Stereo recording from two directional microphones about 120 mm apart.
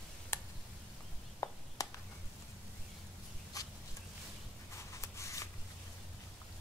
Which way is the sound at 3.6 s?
30° left (ahead or behind).